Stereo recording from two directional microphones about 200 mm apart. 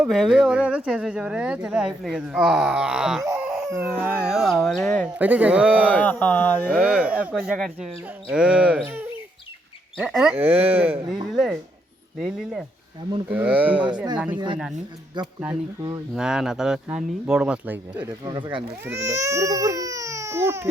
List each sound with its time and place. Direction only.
0.0 s speech: centre (ahead or behind)
5.8 s a sound: 5° left (ahead or behind)
6.8 s speech: 5° right (ahead or behind)
14.3 s speech: 25° right (ahead or behind)
16.1 s speech: 5° right (ahead or behind)
17.9 s speech: 25° right (ahead or behind)